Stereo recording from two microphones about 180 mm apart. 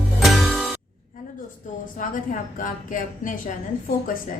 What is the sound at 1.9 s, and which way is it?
A woman's voice, 50° left (ahead or behind).